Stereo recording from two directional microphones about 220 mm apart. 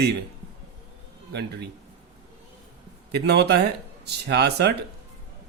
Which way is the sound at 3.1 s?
50° right (ahead or behind).